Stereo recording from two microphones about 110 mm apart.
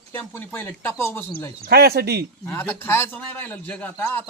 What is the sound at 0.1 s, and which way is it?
Speech, 20° left (ahead or behind).